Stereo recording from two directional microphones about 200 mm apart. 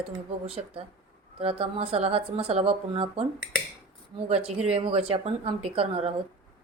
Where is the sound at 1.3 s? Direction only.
30° right (ahead or behind).